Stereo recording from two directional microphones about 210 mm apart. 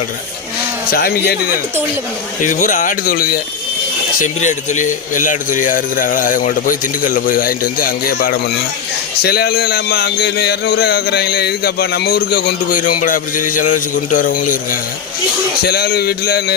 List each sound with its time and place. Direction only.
0.9 s speech: 45° left (ahead or behind)
2.4 s speech: 40° left (ahead or behind)